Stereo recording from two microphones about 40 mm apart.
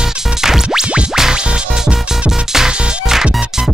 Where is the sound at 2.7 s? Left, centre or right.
Centre.